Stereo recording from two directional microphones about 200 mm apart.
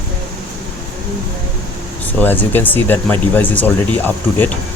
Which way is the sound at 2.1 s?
10° left (ahead or behind).